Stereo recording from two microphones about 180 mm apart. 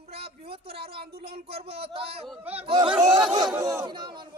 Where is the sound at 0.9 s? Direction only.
60° right (ahead or behind).